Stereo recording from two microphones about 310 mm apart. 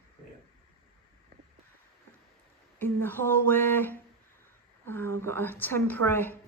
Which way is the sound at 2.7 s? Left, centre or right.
Centre.